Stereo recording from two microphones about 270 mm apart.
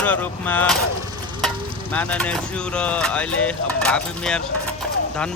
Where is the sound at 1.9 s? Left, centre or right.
Centre.